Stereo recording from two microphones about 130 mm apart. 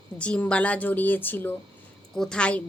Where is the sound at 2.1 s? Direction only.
5° left (ahead or behind).